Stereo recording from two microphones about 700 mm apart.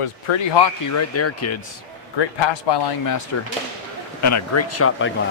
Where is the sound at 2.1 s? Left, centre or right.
Left; by 5.1 s centre.